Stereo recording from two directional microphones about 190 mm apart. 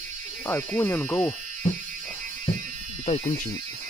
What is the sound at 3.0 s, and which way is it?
Speech, 35° left (ahead or behind).